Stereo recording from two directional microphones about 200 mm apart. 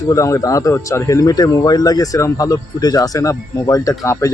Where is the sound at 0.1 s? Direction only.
15° left (ahead or behind).